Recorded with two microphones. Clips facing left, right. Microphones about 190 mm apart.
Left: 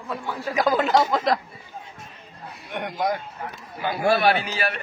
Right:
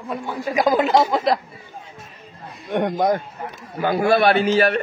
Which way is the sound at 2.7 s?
50° right (ahead or behind).